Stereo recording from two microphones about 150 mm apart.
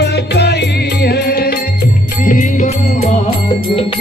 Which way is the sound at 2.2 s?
60° left (ahead or behind).